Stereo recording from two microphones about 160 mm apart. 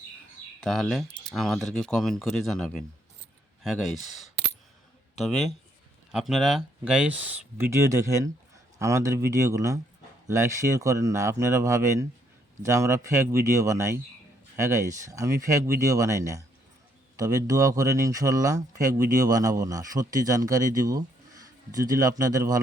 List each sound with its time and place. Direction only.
0.6 s speech: centre (ahead or behind); by 22.6 s 20° right (ahead or behind)